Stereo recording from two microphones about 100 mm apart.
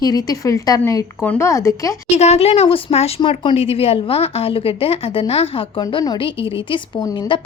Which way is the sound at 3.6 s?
75° left (ahead or behind).